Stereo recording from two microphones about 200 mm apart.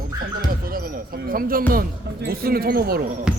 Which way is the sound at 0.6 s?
45° right (ahead or behind).